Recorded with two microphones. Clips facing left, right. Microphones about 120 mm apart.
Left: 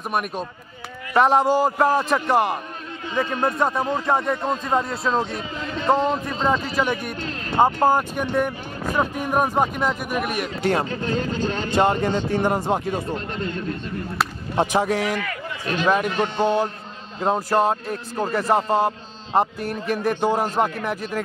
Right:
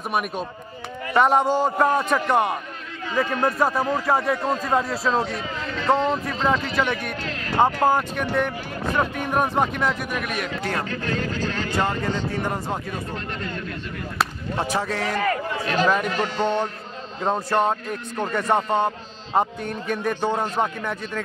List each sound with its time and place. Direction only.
0.1 s a man's voice: centre (ahead or behind)
3.2 s speech: 20° left (ahead or behind)
3.5 s a man's voice: centre (ahead or behind)
5.8 s speech: 15° left (ahead or behind)
10.6 s speech: 25° left (ahead or behind)
14.6 s speech: 15° left (ahead or behind)
15.1 s a sound: 40° right (ahead or behind)
16.2 s a man's voice: 15° left (ahead or behind)